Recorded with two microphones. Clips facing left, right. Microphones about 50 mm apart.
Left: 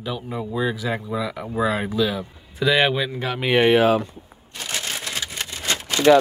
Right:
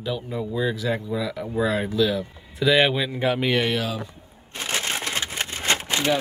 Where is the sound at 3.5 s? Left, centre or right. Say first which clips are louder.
Left 7 dB; left.